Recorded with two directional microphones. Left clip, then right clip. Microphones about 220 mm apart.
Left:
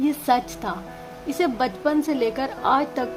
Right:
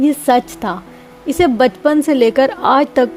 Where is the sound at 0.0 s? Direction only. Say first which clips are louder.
Right 8 dB; 35° right (ahead or behind).